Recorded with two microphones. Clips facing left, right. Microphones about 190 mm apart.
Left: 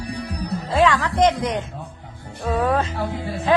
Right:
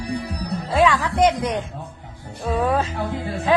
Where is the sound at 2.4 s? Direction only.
10° right (ahead or behind).